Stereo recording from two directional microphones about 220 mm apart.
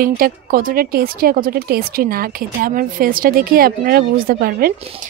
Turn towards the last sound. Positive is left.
turn(degrees=-45)  # may be behind; listen again after turning